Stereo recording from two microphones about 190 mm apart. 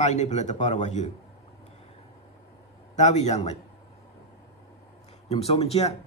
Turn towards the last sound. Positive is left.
turn(degrees=30)  # may be behind; listen again after turning